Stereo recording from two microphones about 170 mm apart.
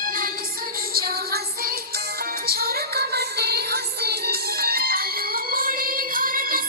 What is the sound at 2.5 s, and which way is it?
Music, 65° right (ahead or behind).